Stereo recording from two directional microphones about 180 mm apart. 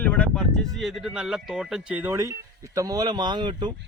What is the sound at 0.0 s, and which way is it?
Speech, 10° left (ahead or behind).